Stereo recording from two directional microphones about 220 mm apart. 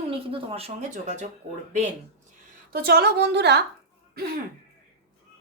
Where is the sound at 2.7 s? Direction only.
45° right (ahead or behind).